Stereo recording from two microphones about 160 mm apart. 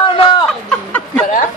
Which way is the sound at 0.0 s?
30° left (ahead or behind).